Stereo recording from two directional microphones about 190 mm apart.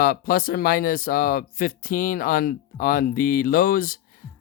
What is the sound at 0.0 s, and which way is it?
Speech, 50° left (ahead or behind).